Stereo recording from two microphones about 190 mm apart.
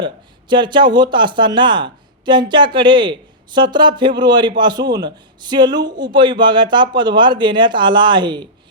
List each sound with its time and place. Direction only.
0.0 s speech: 25° right (ahead or behind)